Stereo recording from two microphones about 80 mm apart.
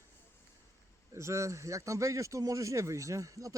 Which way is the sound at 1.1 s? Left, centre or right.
Right.